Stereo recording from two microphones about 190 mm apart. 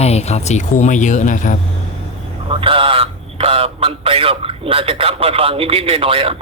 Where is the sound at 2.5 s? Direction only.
25° right (ahead or behind).